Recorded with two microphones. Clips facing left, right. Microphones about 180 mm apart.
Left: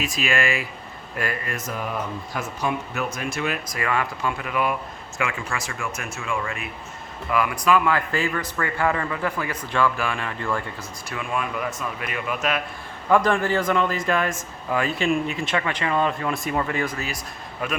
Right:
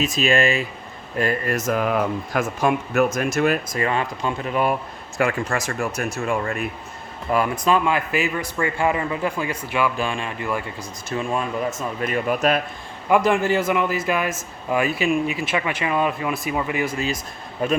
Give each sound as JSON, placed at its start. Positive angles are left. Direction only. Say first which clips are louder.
{"t": 0.0, "sound": "speech", "louder": "right 5 dB", "side_deg": -25}
{"t": 1.7, "sound": "speech", "louder": "right 8 dB", "side_deg": -75}
{"t": 3.7, "sound": "speech", "louder": "right 3 dB", "side_deg": -30}
{"t": 7.5, "sound": "speech", "louder": "right 1 dB", "side_deg": -25}
{"t": 8.5, "sound": "speech", "louder": "right 3 dB", "side_deg": -25}
{"t": 10.4, "sound": "speech", "louder": "even", "side_deg": -10}
{"t": 11.1, "sound": "speech", "louder": "right 4 dB", "side_deg": -25}
{"t": 13.1, "sound": "speech", "louder": "right 2 dB", "side_deg": -10}